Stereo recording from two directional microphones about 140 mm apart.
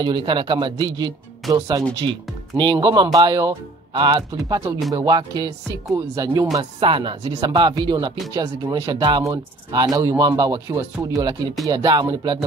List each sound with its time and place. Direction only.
0.0 s speech: 35° right (ahead or behind)